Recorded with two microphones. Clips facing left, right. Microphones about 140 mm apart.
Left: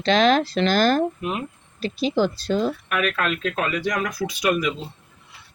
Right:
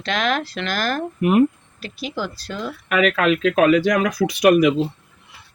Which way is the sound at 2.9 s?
90° right.